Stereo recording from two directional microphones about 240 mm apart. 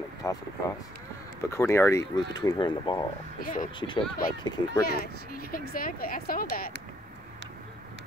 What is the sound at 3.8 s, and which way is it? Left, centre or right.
Speech, centre.